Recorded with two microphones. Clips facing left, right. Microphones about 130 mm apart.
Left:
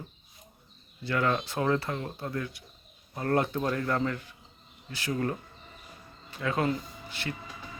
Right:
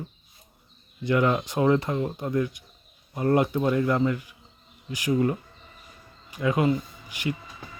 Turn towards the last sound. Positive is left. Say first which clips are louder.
# right 6 dB
turn(degrees=-15)  # may be behind; listen again after turning